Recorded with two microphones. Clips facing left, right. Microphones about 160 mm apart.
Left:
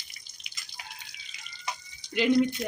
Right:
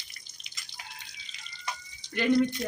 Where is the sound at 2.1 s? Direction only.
15° left (ahead or behind).